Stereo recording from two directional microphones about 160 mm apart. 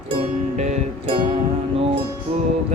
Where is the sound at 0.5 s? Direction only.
45° right (ahead or behind).